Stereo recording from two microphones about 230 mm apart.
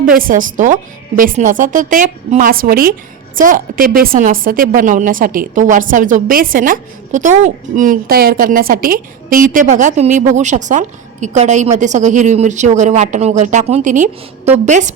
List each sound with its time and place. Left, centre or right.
0.1 s a woman's voice: right